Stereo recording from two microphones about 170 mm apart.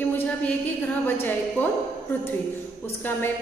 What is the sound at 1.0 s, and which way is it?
Speech, 10° left (ahead or behind).